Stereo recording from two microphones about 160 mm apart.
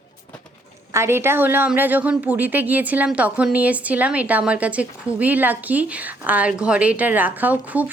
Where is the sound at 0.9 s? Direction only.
15° right (ahead or behind).